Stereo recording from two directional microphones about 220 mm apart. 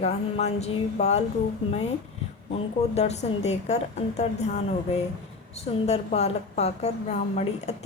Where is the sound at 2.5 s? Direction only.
30° left (ahead or behind).